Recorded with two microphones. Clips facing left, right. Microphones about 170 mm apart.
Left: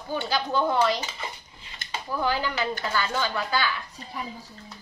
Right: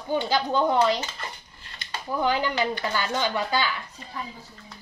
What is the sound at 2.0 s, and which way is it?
A child's voice, 20° right (ahead or behind).